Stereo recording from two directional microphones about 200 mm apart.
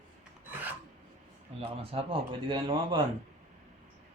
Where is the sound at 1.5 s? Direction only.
30° right (ahead or behind).